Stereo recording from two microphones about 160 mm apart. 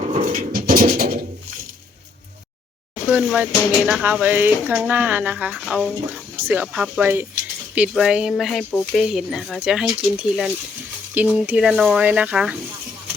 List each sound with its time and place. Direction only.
0.1 s pigeon: 55° right (ahead or behind)
0.7 s a sound: 65° right (ahead or behind)
3.1 s speech: 5° right (ahead or behind)